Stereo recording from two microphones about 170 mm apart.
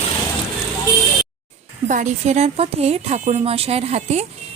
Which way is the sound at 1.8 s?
45° right (ahead or behind).